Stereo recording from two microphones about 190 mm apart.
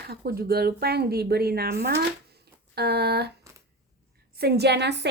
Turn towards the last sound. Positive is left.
turn(degrees=-65)  # may be behind; listen again after turning